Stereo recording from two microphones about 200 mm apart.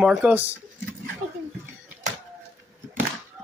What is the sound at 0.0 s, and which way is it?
Speech, 5° right (ahead or behind).